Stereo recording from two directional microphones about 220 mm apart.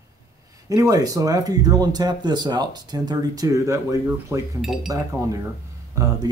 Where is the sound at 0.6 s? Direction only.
15° right (ahead or behind).